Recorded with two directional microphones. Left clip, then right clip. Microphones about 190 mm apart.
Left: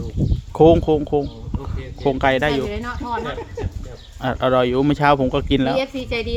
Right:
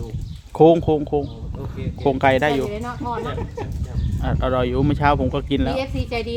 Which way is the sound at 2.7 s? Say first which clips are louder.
Even; 50° left (ahead or behind).